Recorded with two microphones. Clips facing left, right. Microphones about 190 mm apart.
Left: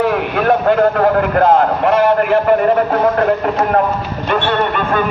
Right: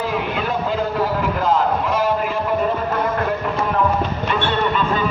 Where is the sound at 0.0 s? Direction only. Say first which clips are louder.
Left 7 dB; 65° left (ahead or behind).